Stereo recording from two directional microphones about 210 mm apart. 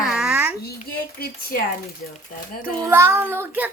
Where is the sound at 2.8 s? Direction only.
10° right (ahead or behind).